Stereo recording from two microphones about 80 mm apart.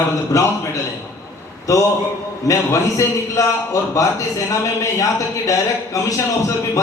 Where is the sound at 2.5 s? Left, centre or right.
Left.